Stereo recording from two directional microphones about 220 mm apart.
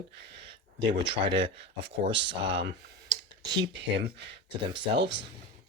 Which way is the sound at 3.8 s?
50° right (ahead or behind).